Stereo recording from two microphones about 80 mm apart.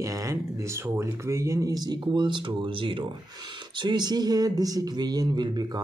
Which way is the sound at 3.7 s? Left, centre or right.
Right.